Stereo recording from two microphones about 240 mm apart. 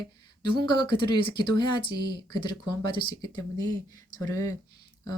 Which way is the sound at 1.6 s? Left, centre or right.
Centre.